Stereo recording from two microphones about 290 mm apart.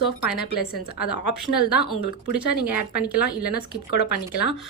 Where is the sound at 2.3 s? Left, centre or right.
Centre.